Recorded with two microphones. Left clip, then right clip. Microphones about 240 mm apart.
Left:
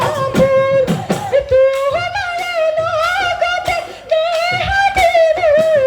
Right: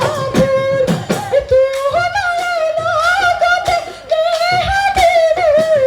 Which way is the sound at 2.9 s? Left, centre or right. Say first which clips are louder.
Right 3 dB; right.